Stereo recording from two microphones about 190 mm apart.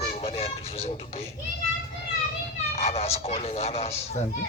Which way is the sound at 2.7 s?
35° left (ahead or behind).